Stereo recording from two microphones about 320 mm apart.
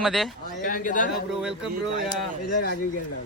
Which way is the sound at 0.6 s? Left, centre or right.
Left.